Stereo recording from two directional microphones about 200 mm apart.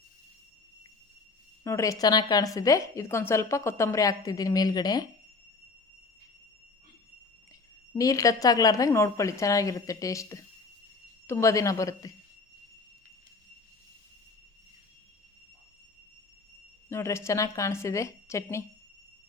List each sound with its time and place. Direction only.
1.6 s a woman's voice: 15° left (ahead or behind)
7.9 s a woman's voice: 15° left (ahead or behind)
16.9 s a woman's voice: 15° left (ahead or behind)